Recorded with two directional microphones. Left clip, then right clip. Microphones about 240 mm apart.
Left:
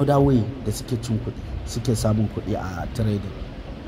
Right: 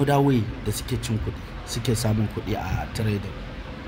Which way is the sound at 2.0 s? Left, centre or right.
Right.